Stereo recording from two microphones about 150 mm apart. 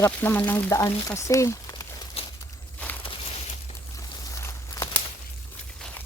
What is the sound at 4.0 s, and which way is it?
Walk, 20° left (ahead or behind).